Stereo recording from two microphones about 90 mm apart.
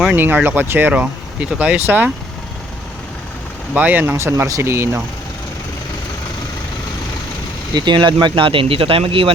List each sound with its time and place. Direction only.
0.1 s speech: 20° right (ahead or behind)
3.8 s speech: 20° right (ahead or behind)
7.7 s speech: 55° right (ahead or behind); by 9.3 s 90° right